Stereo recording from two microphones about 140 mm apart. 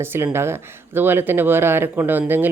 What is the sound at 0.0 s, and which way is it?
Speech, 15° right (ahead or behind).